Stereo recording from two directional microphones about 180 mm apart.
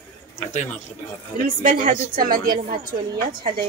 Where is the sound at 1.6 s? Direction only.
50° right (ahead or behind).